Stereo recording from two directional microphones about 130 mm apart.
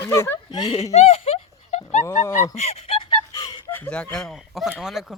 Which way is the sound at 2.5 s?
60° left (ahead or behind).